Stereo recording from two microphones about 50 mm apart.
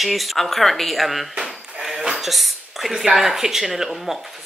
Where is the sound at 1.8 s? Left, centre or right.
Centre.